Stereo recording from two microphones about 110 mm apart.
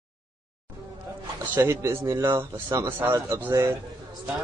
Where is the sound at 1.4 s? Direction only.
20° right (ahead or behind).